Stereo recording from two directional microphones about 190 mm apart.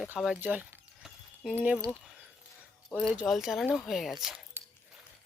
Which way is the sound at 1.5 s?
10° right (ahead or behind).